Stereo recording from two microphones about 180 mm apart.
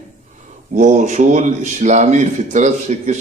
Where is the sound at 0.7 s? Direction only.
40° right (ahead or behind).